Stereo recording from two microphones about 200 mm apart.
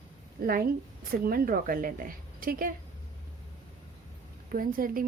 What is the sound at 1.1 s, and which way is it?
A woman's voice, 45° right (ahead or behind).